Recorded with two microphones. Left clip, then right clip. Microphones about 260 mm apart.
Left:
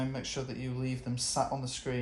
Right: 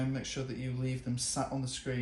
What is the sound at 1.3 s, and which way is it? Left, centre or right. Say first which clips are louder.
Speech: left 6 dB; left.